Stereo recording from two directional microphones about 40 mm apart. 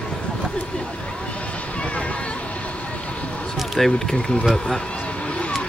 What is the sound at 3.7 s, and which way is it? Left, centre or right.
Speech, centre.